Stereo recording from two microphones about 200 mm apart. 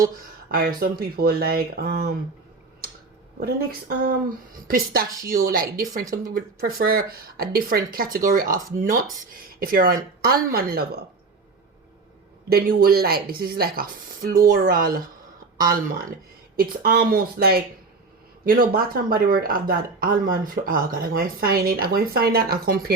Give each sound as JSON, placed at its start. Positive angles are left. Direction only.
{"t": 0.5, "sound": "speech", "side_deg": -50}
{"t": 3.4, "sound": "speech", "side_deg": -50}
{"t": 5.2, "sound": "speech", "side_deg": -45}
{"t": 12.5, "sound": "speech", "side_deg": -50}